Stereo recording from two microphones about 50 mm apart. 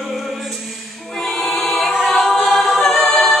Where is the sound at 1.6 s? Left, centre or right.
Centre.